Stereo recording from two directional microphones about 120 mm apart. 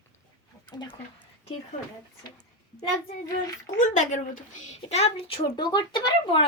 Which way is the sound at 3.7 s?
90° left.